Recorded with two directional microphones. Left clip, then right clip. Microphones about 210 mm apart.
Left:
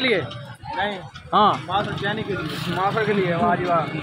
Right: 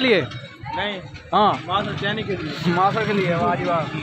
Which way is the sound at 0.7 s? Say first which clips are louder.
Left 1 dB; centre (ahead or behind).